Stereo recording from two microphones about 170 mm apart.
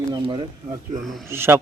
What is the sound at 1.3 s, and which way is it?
Speech, 15° right (ahead or behind).